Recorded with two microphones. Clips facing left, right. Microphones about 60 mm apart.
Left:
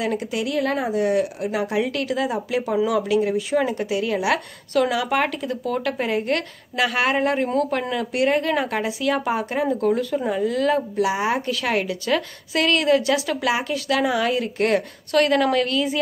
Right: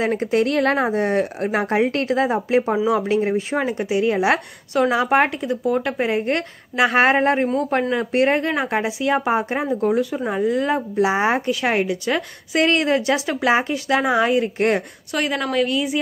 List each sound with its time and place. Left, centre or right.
0.0 s speech: right
1.8 s a woman's voice: right
15.1 s a woman's voice: centre